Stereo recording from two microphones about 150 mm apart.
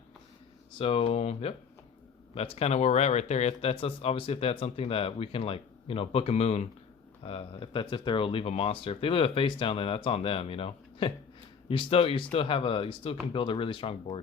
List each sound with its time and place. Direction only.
0.8 s speech: 40° left (ahead or behind)